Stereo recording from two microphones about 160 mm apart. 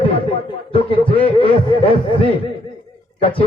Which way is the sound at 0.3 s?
35° left (ahead or behind).